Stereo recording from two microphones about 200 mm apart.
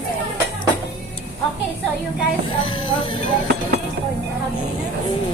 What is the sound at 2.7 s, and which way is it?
Speech, 25° left (ahead or behind).